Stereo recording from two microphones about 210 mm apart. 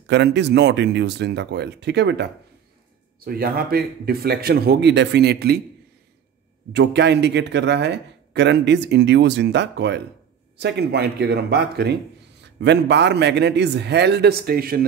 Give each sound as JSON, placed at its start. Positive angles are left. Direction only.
{"t": 0.0, "sound": "a man's voice", "side_deg": -55}
{"t": 3.3, "sound": "speech", "side_deg": -45}
{"t": 6.7, "sound": "a man's voice", "side_deg": -55}